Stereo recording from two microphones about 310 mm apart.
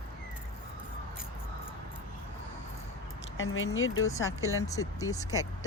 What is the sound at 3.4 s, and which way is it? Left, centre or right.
Speech, left.